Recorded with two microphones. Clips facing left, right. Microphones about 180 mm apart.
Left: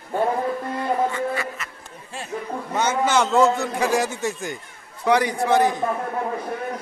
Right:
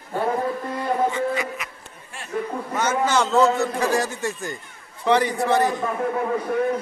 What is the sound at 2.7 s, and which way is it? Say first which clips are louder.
A man's voice: left 1 dB; 20° left (ahead or behind).